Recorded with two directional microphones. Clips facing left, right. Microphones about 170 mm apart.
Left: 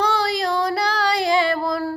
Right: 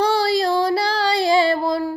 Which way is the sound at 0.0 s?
30° right (ahead or behind).